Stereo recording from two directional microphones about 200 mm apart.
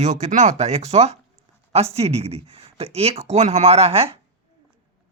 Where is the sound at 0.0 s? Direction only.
35° right (ahead or behind).